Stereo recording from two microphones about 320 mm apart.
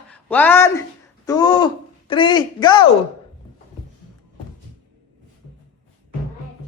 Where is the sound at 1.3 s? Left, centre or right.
Centre.